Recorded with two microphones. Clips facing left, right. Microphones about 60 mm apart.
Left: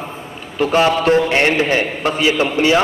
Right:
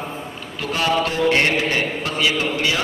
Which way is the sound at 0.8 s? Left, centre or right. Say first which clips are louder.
Left 6 dB; left.